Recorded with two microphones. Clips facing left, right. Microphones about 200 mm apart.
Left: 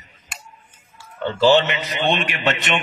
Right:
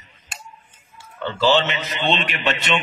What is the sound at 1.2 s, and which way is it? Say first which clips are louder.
A man's voice: left 3 dB; 15° left (ahead or behind).